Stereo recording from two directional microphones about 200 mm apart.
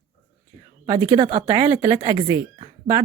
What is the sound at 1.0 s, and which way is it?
Speech, 20° right (ahead or behind).